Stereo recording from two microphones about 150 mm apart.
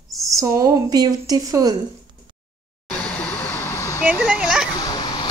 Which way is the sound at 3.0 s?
10° left (ahead or behind).